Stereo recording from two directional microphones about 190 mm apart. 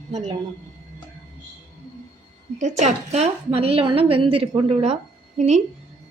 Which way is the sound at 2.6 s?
40° right (ahead or behind).